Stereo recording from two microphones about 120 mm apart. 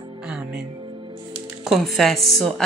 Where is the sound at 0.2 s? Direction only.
10° right (ahead or behind).